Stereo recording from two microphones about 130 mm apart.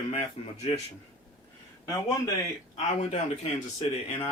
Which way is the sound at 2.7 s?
50° left (ahead or behind).